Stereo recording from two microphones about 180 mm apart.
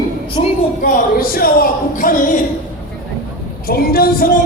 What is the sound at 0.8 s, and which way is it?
Speech, 50° left (ahead or behind).